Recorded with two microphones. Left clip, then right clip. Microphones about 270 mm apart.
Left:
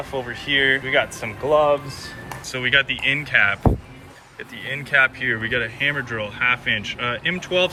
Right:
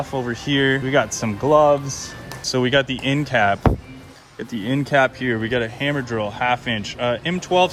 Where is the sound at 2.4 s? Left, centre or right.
Centre.